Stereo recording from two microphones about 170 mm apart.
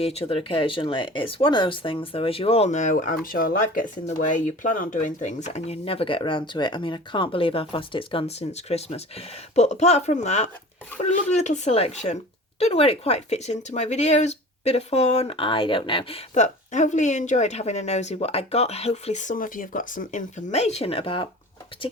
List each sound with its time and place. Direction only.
0.0 s speech: 35° left (ahead or behind)